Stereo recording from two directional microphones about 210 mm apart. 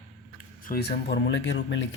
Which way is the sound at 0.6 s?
45° left (ahead or behind).